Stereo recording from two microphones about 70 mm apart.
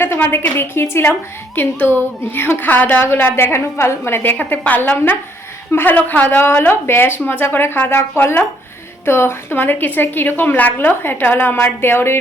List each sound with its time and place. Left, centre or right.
0.0 s a woman's voice: left